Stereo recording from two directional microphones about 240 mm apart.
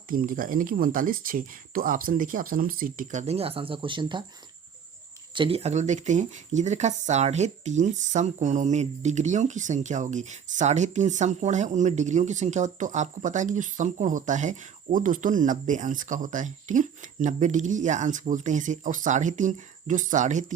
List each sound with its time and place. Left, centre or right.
0.1 s speech: right
5.3 s speech: right